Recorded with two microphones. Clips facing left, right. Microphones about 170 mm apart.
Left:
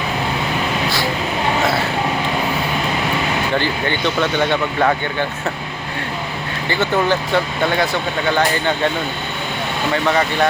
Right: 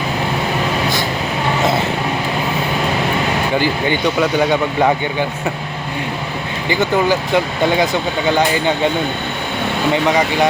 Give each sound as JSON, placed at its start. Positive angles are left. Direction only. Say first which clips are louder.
{"t": 3.5, "sound": "speech", "louder": "right 3 dB", "side_deg": -10}
{"t": 6.7, "sound": "speech", "louder": "right 2 dB", "side_deg": -15}
{"t": 9.9, "sound": "speech", "louder": "right 1 dB", "side_deg": -15}